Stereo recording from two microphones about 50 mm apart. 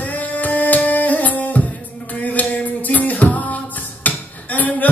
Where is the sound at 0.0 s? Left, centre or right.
Left.